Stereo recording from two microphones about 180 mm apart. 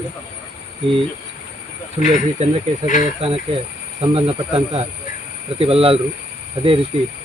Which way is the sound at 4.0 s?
35° right (ahead or behind).